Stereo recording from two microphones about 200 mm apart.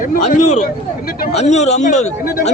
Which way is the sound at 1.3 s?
35° left (ahead or behind).